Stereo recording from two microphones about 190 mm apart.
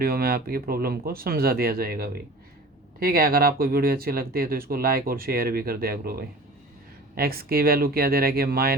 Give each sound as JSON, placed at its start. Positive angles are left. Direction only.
{"t": 0.0, "sound": "speech", "side_deg": -55}